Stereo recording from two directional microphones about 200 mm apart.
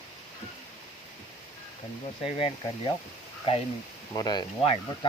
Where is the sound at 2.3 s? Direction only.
30° left (ahead or behind).